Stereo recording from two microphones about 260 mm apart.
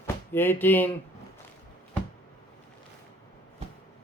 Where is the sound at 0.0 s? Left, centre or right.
Centre.